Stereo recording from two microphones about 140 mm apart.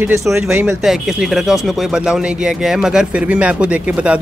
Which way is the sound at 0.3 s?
15° right (ahead or behind).